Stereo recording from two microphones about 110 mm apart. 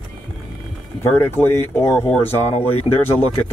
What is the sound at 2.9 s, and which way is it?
Speech, 65° left (ahead or behind).